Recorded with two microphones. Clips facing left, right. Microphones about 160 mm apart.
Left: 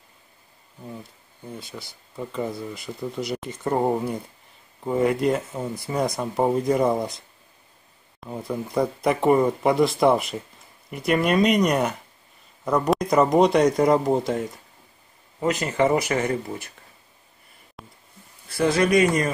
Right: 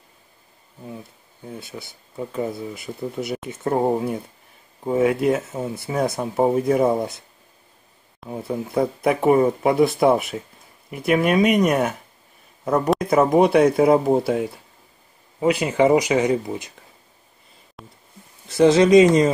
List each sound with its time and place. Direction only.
0.8 s speech: 5° right (ahead or behind)
17.8 s a sound: centre (ahead or behind)
18.6 s speech: 25° right (ahead or behind)